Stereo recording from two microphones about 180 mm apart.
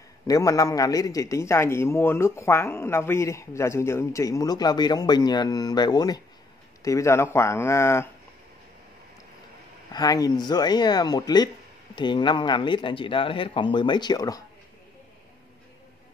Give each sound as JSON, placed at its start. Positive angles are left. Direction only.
{"t": 0.3, "sound": "a man's voice", "side_deg": 20}
{"t": 9.9, "sound": "speech", "side_deg": 20}